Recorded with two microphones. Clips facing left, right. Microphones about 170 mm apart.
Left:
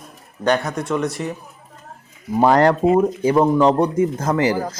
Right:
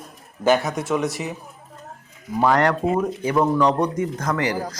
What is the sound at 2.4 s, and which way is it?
Speech, 30° left (ahead or behind).